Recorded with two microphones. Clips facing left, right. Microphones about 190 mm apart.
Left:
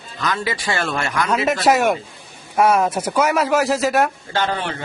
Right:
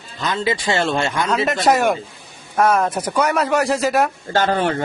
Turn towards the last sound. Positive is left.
turn(degrees=-45)  # may be behind; listen again after turning